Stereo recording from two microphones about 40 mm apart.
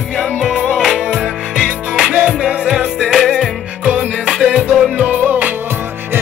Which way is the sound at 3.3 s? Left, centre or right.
Centre.